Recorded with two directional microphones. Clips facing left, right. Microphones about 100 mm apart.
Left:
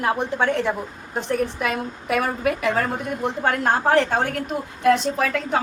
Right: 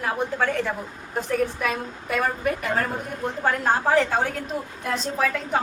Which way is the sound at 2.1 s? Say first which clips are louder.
Left 2 dB; 80° left.